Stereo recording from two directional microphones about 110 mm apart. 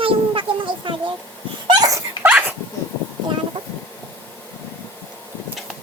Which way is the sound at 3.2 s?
45° right (ahead or behind).